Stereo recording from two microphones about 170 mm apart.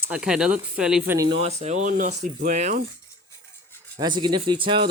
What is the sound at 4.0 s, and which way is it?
Speech, 25° right (ahead or behind).